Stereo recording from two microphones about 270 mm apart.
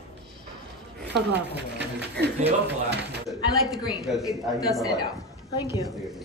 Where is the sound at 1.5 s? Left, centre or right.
Right.